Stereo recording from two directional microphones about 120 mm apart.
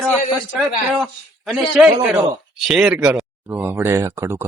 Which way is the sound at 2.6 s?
5° right (ahead or behind).